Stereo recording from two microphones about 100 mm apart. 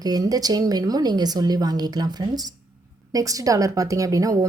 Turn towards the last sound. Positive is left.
turn(degrees=-35)  # may be behind; listen again after turning